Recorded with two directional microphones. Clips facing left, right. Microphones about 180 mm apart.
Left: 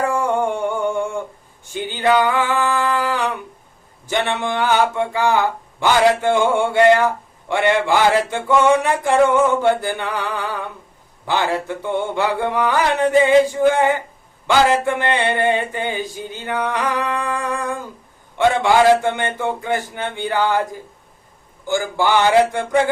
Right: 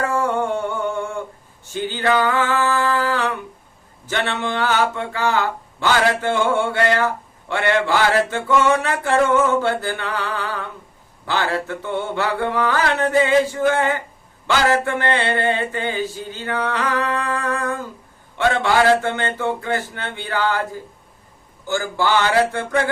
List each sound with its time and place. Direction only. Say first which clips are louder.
0.0 s a sound: left 2 dB; 15° left (ahead or behind)
4.0 s speech: left 2 dB; 15° left (ahead or behind)
21.7 s speech: left 2 dB; 15° left (ahead or behind)